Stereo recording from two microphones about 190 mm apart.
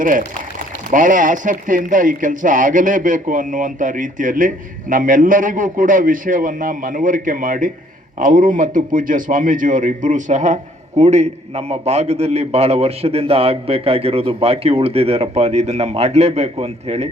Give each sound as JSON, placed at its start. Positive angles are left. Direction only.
{"t": 0.0, "sound": "a man's voice", "side_deg": -45}